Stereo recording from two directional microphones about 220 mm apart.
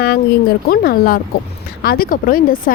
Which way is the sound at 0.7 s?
45° left (ahead or behind).